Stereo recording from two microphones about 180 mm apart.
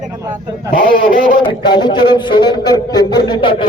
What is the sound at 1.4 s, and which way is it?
A man's voice, 25° left (ahead or behind).